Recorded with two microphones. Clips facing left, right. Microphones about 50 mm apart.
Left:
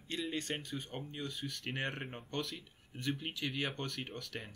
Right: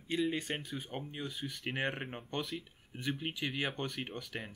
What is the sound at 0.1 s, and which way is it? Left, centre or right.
Speech, centre.